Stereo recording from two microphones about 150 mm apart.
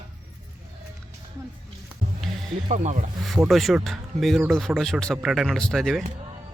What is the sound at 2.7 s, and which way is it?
Speech, 55° right (ahead or behind).